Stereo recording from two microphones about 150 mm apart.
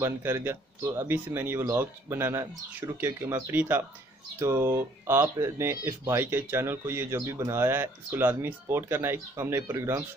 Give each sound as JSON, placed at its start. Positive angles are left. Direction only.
{"t": 0.0, "sound": "speech", "side_deg": -15}